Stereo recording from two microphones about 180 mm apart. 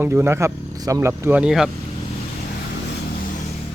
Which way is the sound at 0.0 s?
15° right (ahead or behind).